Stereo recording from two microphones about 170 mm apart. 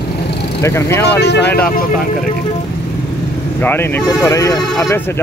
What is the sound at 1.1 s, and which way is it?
Speech, 80° left.